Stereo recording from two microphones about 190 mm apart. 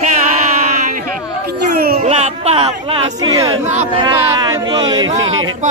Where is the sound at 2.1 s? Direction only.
35° right (ahead or behind).